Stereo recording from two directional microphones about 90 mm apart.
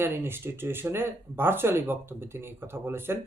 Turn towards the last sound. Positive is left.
turn(degrees=-25)  # may be behind; listen again after turning